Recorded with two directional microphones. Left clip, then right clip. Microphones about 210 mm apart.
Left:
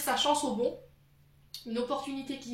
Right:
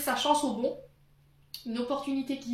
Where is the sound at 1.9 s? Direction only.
30° right (ahead or behind).